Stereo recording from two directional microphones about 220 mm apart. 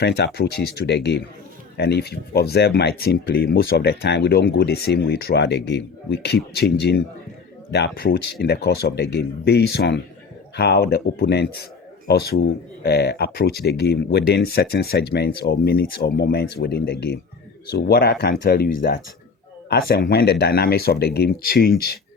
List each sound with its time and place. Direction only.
0.3 s speech: 50° left (ahead or behind)